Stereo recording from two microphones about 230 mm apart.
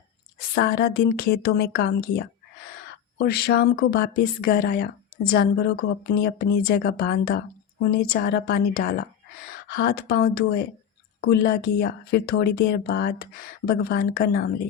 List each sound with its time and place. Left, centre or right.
0.3 s speech: left